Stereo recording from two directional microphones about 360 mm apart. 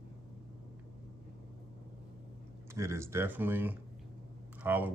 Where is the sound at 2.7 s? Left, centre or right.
Centre.